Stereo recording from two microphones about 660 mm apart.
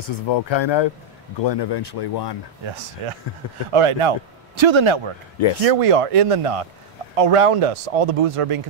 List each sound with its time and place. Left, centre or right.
0.0 s speech: left
2.6 s speech: right